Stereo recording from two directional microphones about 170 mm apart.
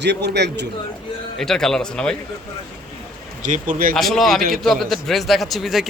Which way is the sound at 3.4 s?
50° right (ahead or behind).